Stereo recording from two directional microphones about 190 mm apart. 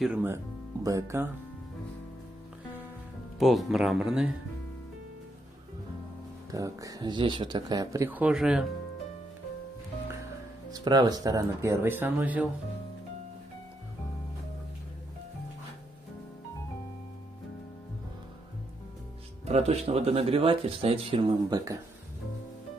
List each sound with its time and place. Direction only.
0.0 s speech: 10° right (ahead or behind)
3.3 s speech: centre (ahead or behind)
6.5 s speech: 20° right (ahead or behind)
10.7 s speech: 20° right (ahead or behind)
19.4 s speech: 35° right (ahead or behind)